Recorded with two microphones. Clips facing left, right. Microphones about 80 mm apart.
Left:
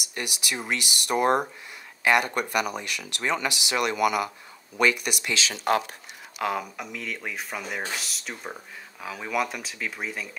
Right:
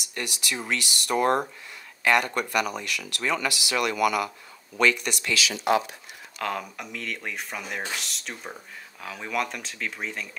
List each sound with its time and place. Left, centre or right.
0.1 s speech: centre
4.7 s speech: centre
5.5 s speech: left
6.3 s speech: centre